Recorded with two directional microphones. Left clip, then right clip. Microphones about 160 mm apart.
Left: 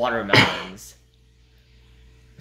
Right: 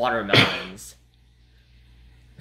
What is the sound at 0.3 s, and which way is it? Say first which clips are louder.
Speech: left 2 dB; 15° left (ahead or behind).